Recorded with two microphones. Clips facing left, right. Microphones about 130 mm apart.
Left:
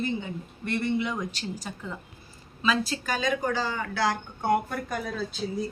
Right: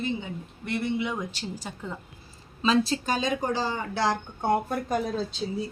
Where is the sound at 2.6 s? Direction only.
30° right (ahead or behind).